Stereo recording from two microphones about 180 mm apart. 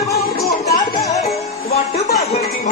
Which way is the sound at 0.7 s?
40° left (ahead or behind).